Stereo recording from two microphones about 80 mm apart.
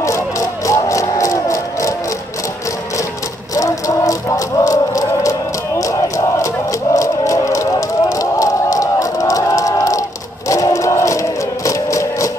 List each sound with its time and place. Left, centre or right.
0.7 s music: left
3.5 s music: left